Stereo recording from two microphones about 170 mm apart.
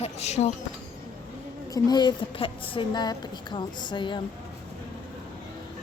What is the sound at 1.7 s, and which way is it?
A woman's voice, 25° left (ahead or behind).